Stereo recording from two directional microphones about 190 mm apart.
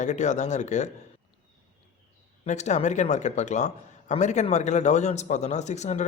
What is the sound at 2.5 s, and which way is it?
Speech, 40° left (ahead or behind).